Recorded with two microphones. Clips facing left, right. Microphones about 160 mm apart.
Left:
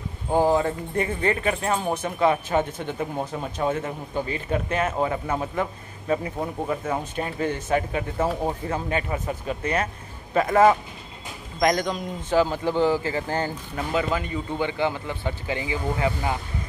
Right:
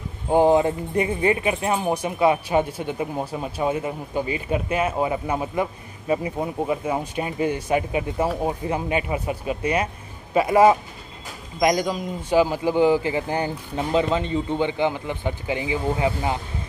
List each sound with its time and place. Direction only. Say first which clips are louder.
0.3 s a man's voice: right 4 dB; 20° right (ahead or behind)